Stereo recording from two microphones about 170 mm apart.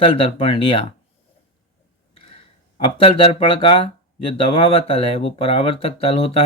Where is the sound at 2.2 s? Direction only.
35° left (ahead or behind).